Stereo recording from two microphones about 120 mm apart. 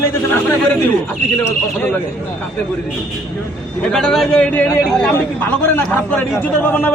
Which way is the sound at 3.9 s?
Centre (ahead or behind).